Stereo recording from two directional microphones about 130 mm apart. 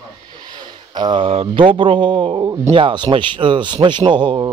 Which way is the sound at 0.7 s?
35° right (ahead or behind).